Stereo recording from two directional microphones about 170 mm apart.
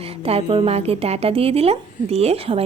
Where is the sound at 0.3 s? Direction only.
35° right (ahead or behind).